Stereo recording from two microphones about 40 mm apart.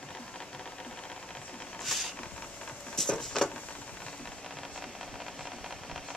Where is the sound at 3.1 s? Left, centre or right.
Centre.